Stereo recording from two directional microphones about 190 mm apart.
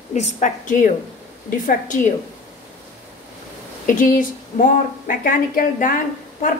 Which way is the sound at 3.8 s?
45° left (ahead or behind).